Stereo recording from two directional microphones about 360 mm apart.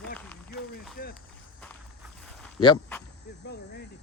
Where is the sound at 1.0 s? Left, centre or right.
Left.